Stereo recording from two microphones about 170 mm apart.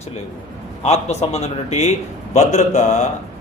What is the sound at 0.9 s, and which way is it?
A man's voice, 40° left (ahead or behind).